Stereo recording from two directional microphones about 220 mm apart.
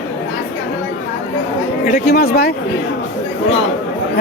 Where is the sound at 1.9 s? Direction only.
45° left (ahead or behind).